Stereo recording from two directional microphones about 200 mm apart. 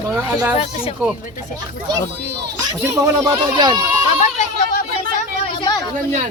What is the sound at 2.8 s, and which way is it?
Speech, 15° right (ahead or behind).